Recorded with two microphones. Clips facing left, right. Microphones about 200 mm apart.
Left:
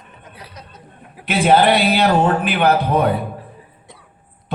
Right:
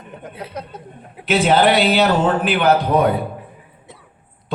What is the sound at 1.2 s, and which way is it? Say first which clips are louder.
A man's voice: left 1 dB; 55° left (ahead or behind).